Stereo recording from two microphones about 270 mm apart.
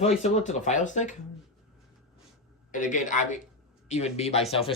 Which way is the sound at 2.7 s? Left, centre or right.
Left.